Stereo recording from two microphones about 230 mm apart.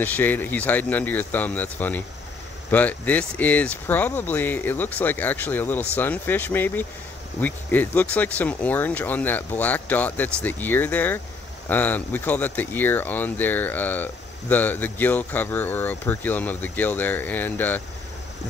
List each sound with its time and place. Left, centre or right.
0.0 s speech: centre